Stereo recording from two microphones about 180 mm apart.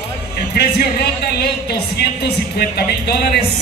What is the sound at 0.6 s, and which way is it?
Speech, 65° left (ahead or behind).